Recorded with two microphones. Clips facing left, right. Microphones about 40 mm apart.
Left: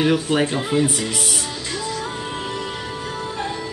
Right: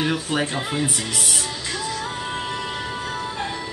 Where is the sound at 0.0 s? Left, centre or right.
Centre.